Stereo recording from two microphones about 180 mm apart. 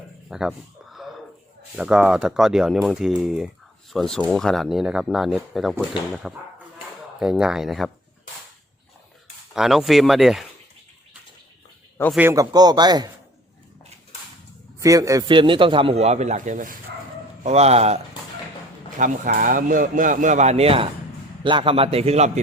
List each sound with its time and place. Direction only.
0.3 s a sound: centre (ahead or behind)
1.7 s speech: 5° right (ahead or behind)
9.6 s speech: centre (ahead or behind)
12.1 s a man's voice: 15° right (ahead or behind)
14.8 s a man's voice: 20° right (ahead or behind); by 18.0 s 35° right (ahead or behind)
18.9 s a man's voice: 45° right (ahead or behind)